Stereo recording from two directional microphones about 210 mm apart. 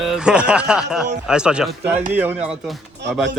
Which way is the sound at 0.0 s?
5° right (ahead or behind).